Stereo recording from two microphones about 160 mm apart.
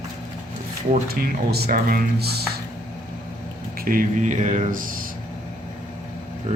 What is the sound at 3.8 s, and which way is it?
Speech, 55° right (ahead or behind).